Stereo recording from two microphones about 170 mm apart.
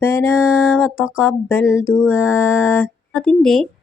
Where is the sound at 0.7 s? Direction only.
Centre (ahead or behind).